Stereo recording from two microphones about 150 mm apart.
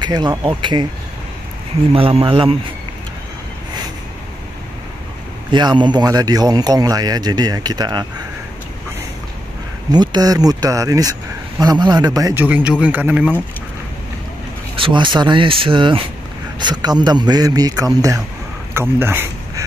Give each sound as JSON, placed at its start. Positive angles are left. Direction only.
{"t": 0.0, "sound": "speech", "side_deg": -25}
{"t": 1.9, "sound": "speech", "side_deg": -40}
{"t": 5.5, "sound": "speech", "side_deg": -30}
{"t": 9.9, "sound": "speech", "side_deg": -25}
{"t": 12.4, "sound": "speech", "side_deg": -10}
{"t": 14.8, "sound": "speech", "side_deg": -30}
{"t": 18.7, "sound": "a sound", "side_deg": -15}